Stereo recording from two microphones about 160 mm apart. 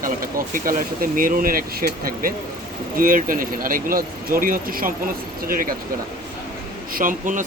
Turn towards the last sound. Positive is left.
turn(degrees=-55)  # may be behind; listen again after turning